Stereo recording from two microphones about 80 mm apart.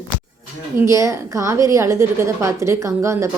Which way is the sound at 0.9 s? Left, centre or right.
Right.